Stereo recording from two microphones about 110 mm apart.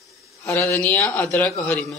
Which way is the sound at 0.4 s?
25° left (ahead or behind).